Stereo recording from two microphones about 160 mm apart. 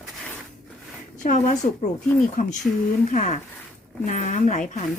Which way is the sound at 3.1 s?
55° left (ahead or behind).